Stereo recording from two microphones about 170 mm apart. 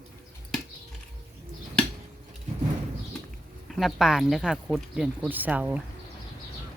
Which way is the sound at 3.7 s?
Centre (ahead or behind).